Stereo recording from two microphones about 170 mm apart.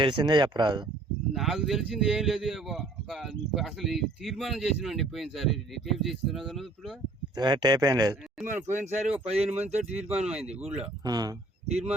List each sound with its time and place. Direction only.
0.0 s speech: 25° right (ahead or behind)
1.3 s speech: centre (ahead or behind)
7.3 s speech: 25° right (ahead or behind); by 10.8 s 5° right (ahead or behind)
11.0 s speech: 25° right (ahead or behind)